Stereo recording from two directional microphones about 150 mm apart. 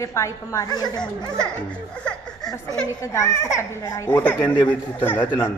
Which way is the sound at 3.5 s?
20° left (ahead or behind).